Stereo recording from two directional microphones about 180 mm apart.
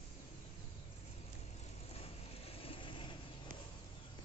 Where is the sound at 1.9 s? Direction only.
35° left (ahead or behind).